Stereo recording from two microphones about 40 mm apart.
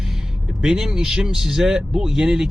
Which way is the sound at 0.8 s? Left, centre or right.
Centre.